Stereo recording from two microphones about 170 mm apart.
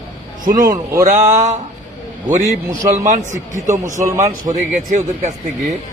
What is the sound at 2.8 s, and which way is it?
A man's voice, 50° right (ahead or behind).